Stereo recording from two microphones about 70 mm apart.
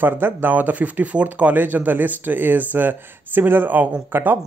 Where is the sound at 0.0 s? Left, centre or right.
Right.